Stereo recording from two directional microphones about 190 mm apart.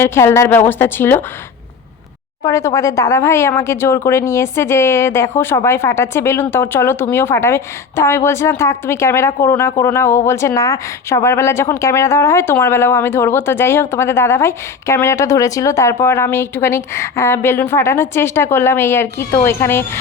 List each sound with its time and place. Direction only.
0.0 s speech: 15° left (ahead or behind)
2.4 s speech: 15° left (ahead or behind)